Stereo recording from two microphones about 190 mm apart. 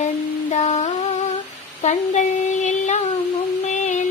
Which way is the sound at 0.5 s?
35° left (ahead or behind).